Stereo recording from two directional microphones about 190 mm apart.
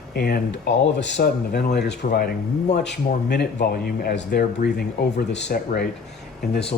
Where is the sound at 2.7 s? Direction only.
65° left (ahead or behind).